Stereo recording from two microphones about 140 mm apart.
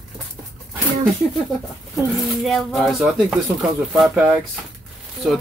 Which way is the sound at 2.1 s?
Centre (ahead or behind).